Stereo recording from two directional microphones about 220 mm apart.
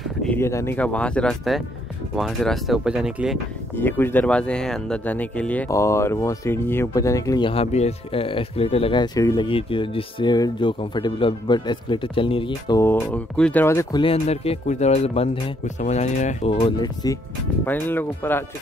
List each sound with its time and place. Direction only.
0.2 s speech: 10° left (ahead or behind)
3.7 s speech: 10° left (ahead or behind)
14.0 s speech: 30° left (ahead or behind); by 18.4 s 10° left (ahead or behind)